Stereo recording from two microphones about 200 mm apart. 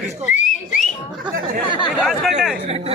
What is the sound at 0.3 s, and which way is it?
Whistling, 40° left (ahead or behind).